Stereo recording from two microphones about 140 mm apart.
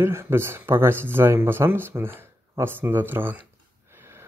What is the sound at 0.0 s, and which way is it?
Speech, 20° right (ahead or behind).